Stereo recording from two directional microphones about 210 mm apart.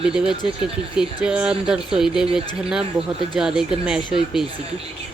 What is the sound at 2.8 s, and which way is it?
Speech, 25° right (ahead or behind).